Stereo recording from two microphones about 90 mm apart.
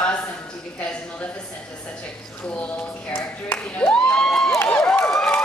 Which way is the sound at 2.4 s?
15° left (ahead or behind).